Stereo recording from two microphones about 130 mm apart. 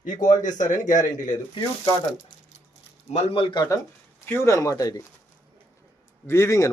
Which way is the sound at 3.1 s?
50° left (ahead or behind).